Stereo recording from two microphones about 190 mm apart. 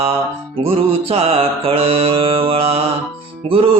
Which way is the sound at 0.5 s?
30° right (ahead or behind).